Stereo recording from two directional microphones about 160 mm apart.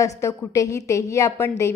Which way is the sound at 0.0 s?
20° left (ahead or behind).